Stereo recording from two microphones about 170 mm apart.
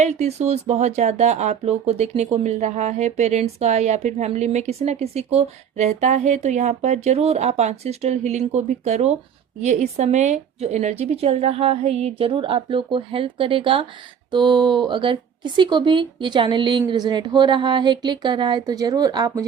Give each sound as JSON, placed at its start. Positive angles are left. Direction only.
{"t": 0.0, "sound": "speech", "side_deg": -40}